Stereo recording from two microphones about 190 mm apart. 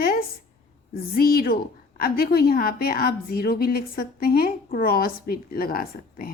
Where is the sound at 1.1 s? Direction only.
50° left (ahead or behind).